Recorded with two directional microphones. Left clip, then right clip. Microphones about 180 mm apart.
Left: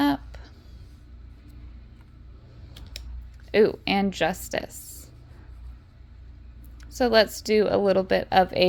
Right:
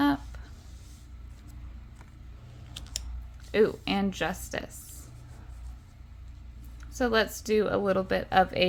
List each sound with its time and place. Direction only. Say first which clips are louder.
0.0 s a sound: left 2 dB; 30° left (ahead or behind)
3.5 s a woman's voice: left 5 dB; 30° left (ahead or behind)
6.9 s a woman's voice: left 6 dB; 30° left (ahead or behind)